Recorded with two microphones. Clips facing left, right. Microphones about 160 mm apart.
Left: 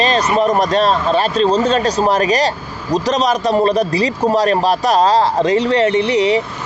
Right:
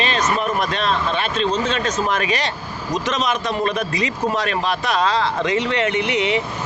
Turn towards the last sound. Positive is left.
turn(degrees=35)  # may be behind; listen again after turning